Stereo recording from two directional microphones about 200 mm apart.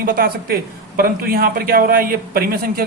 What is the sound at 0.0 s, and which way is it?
A man's voice, 45° right (ahead or behind).